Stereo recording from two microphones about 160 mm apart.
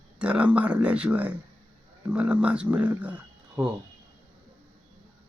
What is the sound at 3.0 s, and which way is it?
Wild animals, 5° right (ahead or behind).